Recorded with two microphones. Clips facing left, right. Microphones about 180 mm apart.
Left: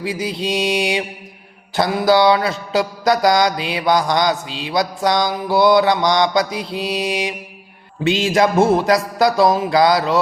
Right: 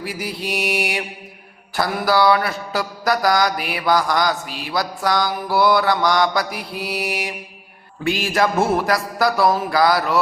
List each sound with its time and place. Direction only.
0.0 s mantra: 20° left (ahead or behind)